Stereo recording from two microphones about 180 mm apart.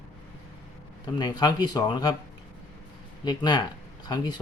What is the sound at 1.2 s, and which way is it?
Speech, 25° left (ahead or behind).